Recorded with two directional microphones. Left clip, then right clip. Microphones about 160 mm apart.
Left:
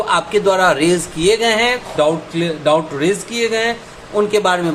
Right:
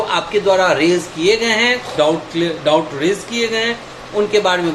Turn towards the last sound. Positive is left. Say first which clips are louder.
# even
turn(degrees=35)  # may be behind; listen again after turning